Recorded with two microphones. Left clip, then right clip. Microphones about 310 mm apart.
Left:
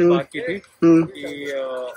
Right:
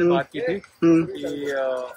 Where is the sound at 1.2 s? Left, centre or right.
Right.